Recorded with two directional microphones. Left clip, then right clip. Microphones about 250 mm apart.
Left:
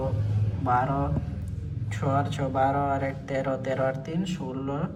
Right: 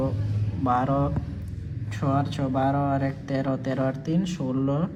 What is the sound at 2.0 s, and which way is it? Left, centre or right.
Speech, centre.